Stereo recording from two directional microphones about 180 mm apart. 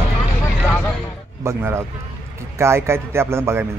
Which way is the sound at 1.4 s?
15° right (ahead or behind).